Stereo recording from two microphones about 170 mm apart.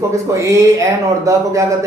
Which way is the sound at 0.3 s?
20° right (ahead or behind).